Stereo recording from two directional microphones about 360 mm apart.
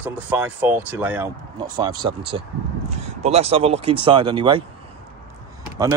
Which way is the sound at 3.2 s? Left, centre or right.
Centre.